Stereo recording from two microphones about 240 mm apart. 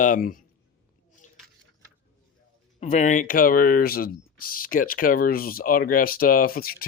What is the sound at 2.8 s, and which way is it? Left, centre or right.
Speech, left.